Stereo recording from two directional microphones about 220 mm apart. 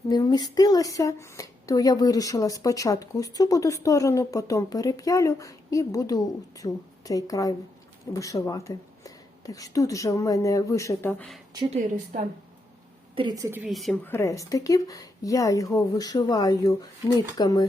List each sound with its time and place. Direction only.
0.1 s speech: 20° left (ahead or behind)
11.5 s a woman's voice: 20° right (ahead or behind)
13.1 s speech: 20° right (ahead or behind); by 17.7 s 15° left (ahead or behind)